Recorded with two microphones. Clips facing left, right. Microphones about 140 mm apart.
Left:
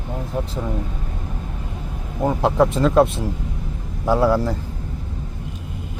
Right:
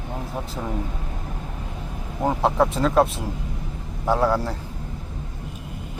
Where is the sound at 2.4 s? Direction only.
Centre (ahead or behind).